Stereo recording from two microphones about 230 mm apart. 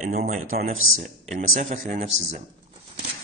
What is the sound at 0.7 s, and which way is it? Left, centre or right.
Speech, right.